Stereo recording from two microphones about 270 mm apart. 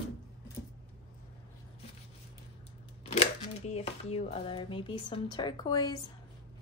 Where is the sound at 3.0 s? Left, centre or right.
Left.